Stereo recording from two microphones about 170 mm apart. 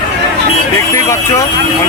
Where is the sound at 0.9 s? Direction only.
15° left (ahead or behind).